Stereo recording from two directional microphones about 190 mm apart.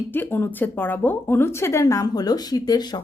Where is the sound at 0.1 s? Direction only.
10° left (ahead or behind).